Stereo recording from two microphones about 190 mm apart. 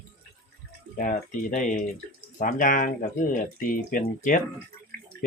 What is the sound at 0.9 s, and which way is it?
Speech, 45° left (ahead or behind).